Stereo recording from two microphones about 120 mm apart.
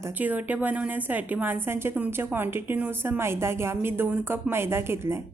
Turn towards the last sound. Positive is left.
turn(degrees=-20)  # may be behind; listen again after turning